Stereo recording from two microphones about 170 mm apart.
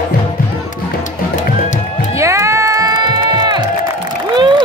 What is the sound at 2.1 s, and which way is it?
Music, 15° right (ahead or behind).